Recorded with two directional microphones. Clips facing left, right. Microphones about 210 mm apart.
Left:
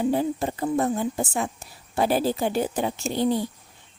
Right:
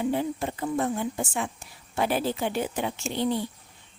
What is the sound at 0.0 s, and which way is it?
Speech, 40° left (ahead or behind).